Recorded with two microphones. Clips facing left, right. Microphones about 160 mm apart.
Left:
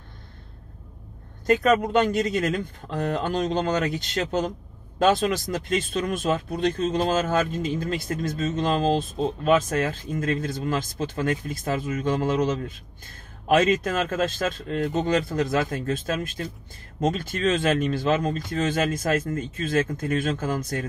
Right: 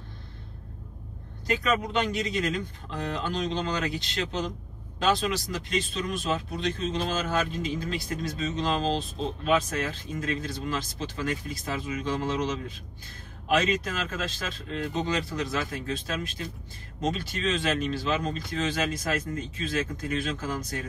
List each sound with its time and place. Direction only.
1.5 s speech: 50° left (ahead or behind)